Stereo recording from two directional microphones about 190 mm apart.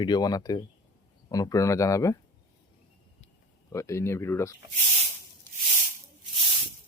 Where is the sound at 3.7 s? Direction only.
15° left (ahead or behind).